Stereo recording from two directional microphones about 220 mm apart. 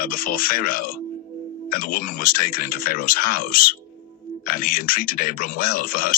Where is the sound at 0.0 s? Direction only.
40° left (ahead or behind).